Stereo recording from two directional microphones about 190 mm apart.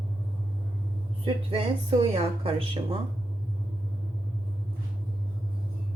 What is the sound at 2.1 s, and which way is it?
Speech, 30° right (ahead or behind).